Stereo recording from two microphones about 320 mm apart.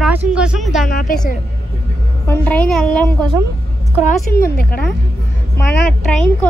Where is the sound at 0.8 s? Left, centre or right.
Left.